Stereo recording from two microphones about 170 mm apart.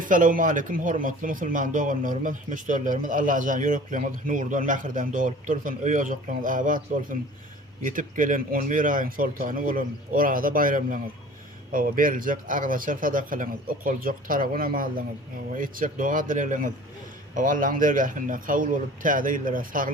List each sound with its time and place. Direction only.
0.0 s speech: 50° right (ahead or behind)